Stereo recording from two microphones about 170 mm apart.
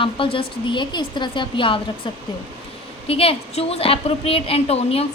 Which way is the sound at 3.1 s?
35° left (ahead or behind).